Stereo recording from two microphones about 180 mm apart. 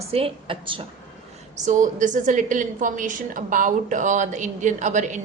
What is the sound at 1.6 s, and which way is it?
A woman's voice, 45° right (ahead or behind).